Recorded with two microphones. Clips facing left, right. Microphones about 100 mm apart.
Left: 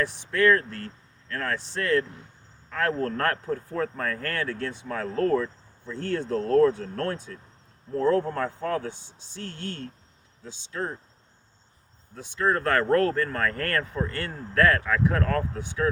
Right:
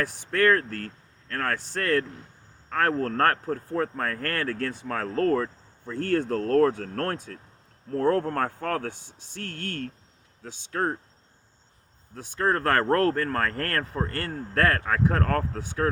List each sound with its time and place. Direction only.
0.3 s speech: 55° right (ahead or behind)
12.1 s speech: 45° right (ahead or behind)